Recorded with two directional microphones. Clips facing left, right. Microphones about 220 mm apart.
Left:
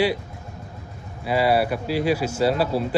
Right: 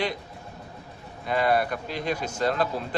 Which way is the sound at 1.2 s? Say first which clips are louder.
Left 4 dB; 5° left (ahead or behind).